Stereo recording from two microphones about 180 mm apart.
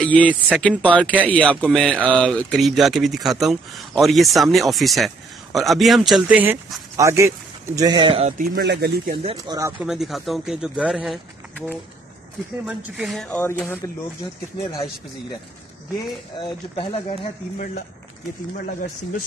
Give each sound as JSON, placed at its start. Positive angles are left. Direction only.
{"t": 0.0, "sound": "speech", "side_deg": 10}
{"t": 8.3, "sound": "speech", "side_deg": -50}
{"t": 8.6, "sound": "speech", "side_deg": -60}
{"t": 9.1, "sound": "speech", "side_deg": -30}
{"t": 9.6, "sound": "speech", "side_deg": -15}
{"t": 9.8, "sound": "speech", "side_deg": 0}
{"t": 12.6, "sound": "speech", "side_deg": -5}
{"t": 16.3, "sound": "speech", "side_deg": 30}